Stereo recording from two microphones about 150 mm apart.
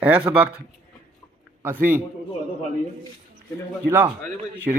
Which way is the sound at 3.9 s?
15° right (ahead or behind).